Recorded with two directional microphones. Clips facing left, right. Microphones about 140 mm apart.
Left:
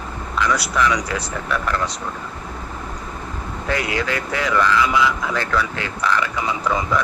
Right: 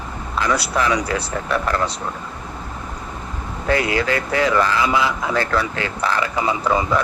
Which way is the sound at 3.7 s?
35° right (ahead or behind).